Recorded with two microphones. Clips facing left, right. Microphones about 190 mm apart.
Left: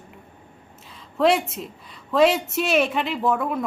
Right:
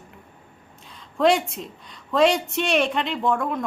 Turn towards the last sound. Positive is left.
turn(degrees=5)  # may be behind; listen again after turning